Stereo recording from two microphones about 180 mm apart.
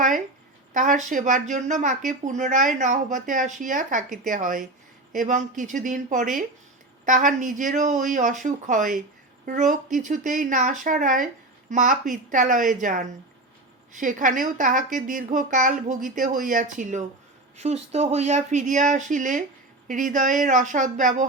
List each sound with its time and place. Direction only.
0.7 s speech: 45° right (ahead or behind)